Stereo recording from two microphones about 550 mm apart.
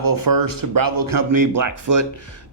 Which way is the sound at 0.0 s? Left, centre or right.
Right.